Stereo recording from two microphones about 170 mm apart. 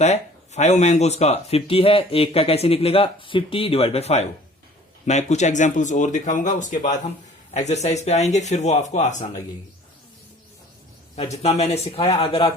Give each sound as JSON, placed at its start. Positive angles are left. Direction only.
{"t": 0.0, "sound": "speech", "side_deg": 40}
{"t": 11.2, "sound": "speech", "side_deg": 40}